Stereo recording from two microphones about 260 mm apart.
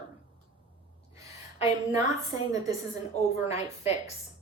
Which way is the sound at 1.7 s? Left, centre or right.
Centre.